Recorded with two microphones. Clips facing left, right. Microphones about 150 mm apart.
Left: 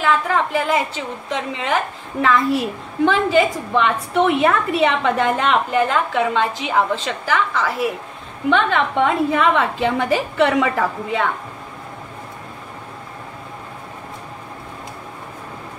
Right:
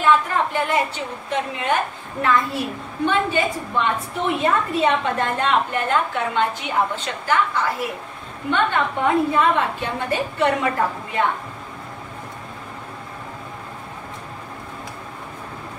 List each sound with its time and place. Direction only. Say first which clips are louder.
0.0 s a woman's voice: even; 90° left